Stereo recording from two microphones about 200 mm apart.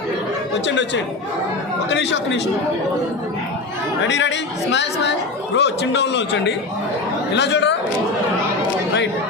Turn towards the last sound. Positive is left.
turn(degrees=60)  # may be behind; listen again after turning